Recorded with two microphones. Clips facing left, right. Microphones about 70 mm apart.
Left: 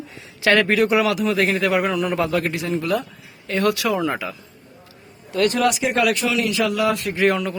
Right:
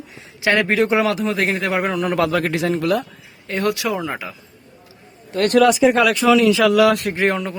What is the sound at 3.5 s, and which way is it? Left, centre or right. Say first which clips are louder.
Speech: left 1 dB; right.